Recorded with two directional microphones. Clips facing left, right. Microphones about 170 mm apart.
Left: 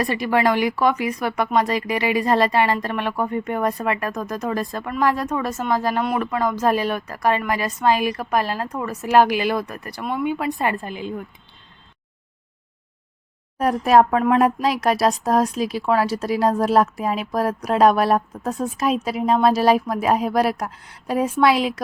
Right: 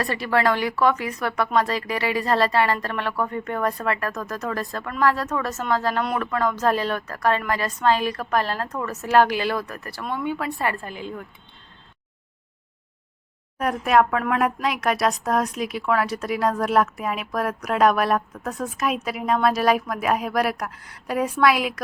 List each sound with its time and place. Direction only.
0.0 s speech: 15° left (ahead or behind)
13.6 s speech: 35° left (ahead or behind)